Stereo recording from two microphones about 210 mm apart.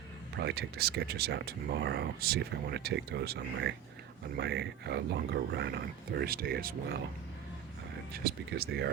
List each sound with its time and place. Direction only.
0.3 s speech: 50° right (ahead or behind)
8.1 s speech: 45° right (ahead or behind)